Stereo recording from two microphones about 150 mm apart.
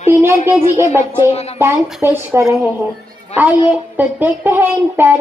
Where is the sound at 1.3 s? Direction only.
45° left (ahead or behind).